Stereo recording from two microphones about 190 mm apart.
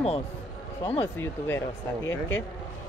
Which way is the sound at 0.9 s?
10° left (ahead or behind).